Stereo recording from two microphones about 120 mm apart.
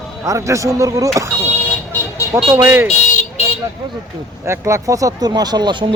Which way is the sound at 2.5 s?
20° right (ahead or behind).